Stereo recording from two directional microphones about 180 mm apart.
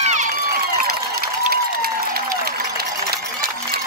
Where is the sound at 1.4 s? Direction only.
55° right (ahead or behind).